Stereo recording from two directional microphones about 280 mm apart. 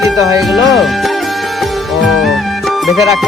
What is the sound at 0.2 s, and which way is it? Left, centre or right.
Speech, centre.